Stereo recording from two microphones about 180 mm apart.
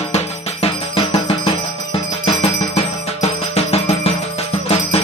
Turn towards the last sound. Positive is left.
turn(degrees=35)  # may be behind; listen again after turning